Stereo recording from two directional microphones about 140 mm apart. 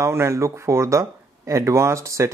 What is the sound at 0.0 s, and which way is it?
Speech, 20° right (ahead or behind).